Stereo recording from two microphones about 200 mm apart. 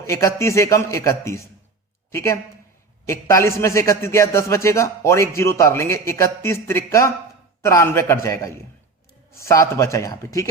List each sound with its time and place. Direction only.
0.1 s a man's voice: 15° left (ahead or behind)